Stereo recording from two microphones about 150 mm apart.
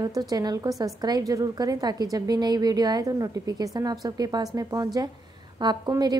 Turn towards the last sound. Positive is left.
turn(degrees=-25)  # may be behind; listen again after turning